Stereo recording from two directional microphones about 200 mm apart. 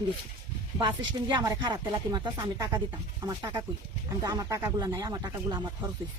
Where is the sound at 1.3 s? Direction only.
20° right (ahead or behind).